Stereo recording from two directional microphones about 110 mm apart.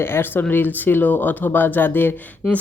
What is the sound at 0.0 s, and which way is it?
Speech, 20° left (ahead or behind).